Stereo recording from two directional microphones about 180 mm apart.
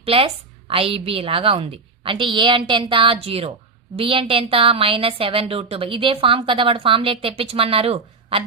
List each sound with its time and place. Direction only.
0.0 s a woman's voice: 30° right (ahead or behind)